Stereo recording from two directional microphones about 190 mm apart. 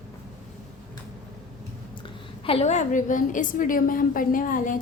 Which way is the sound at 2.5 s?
35° left (ahead or behind).